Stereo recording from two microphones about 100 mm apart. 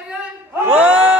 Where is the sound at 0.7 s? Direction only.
15° right (ahead or behind).